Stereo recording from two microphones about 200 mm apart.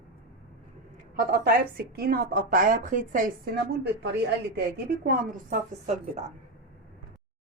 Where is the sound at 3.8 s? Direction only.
60° right (ahead or behind).